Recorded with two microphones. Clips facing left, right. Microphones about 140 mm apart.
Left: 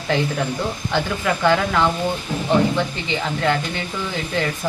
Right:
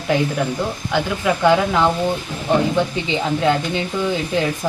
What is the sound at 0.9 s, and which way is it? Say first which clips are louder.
Speech: right 3 dB; 10° right (ahead or behind).